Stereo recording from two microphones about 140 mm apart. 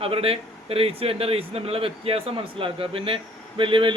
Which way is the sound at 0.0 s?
45° right (ahead or behind).